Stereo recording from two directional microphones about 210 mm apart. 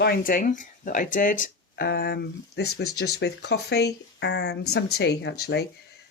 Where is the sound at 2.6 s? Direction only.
90° left.